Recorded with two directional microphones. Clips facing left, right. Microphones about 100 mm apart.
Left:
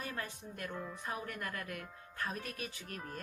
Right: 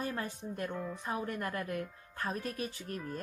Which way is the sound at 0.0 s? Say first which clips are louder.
Right 5 dB; 30° right (ahead or behind).